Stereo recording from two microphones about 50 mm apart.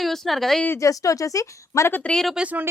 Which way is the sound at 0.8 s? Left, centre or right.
Left.